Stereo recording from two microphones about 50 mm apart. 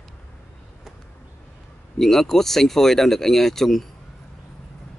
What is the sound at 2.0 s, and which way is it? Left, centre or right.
Speech, centre.